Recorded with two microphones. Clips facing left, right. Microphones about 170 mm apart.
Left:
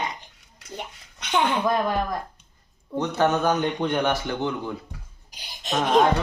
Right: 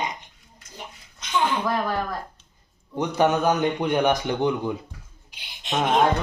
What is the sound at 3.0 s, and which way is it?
A man's voice, 15° right (ahead or behind).